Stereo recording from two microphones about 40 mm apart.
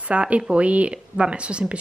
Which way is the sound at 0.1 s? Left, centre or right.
Right.